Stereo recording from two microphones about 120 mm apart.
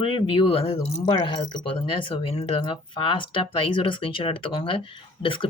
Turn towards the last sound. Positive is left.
turn(degrees=45)  # may be behind; listen again after turning